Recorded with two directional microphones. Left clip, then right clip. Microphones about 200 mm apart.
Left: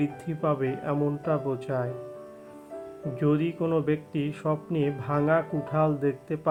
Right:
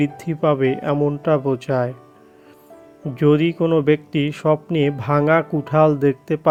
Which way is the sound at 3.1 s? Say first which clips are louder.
Right 10 dB; 35° right (ahead or behind).